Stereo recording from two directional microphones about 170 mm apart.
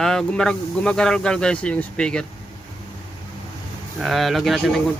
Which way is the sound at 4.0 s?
Centre (ahead or behind).